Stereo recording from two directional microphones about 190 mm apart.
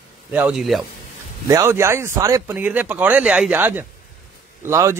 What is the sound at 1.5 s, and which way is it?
A man's voice, 15° right (ahead or behind).